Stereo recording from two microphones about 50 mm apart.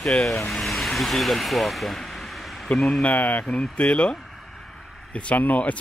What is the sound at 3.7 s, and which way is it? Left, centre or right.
Speech, left.